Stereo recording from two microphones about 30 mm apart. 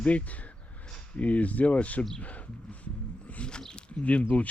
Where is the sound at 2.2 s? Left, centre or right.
Left.